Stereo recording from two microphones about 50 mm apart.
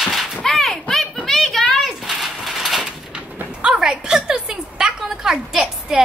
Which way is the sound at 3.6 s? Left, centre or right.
Centre.